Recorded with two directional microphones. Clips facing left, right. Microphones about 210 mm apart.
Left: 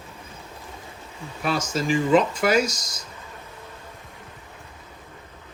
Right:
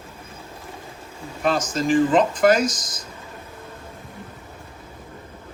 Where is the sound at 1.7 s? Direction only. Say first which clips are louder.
Right 4 dB; 45° right (ahead or behind).